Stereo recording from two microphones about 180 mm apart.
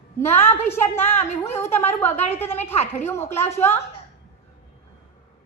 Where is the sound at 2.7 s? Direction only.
35° left (ahead or behind).